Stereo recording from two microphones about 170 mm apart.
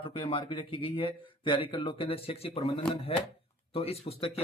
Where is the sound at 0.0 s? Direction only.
30° left (ahead or behind).